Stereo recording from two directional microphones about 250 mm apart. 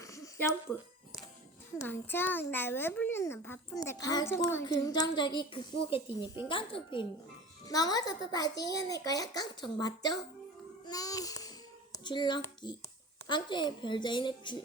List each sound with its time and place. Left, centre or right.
0.0 s a sound: centre
1.9 s a child's voice: centre
10.8 s babbling: centre
13.2 s a woman's voice: centre